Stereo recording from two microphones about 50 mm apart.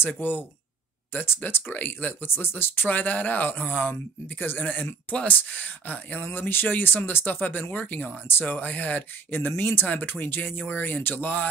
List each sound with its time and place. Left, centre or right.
0.0 s speech: left
1.7 s speech: left